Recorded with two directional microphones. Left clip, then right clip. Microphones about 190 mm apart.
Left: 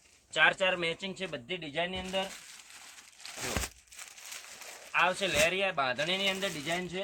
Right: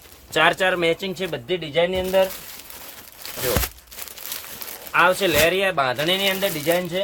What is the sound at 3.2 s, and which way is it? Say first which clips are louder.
Tearing: right 10 dB; 55° right (ahead or behind).